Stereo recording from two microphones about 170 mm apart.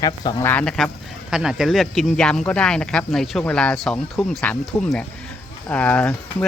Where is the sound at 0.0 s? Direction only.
20° left (ahead or behind).